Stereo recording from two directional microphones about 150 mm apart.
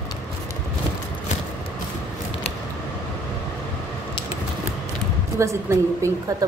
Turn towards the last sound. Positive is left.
turn(degrees=-20)  # may be behind; listen again after turning